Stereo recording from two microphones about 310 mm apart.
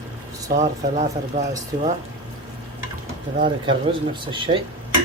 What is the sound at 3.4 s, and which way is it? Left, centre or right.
Speech, centre.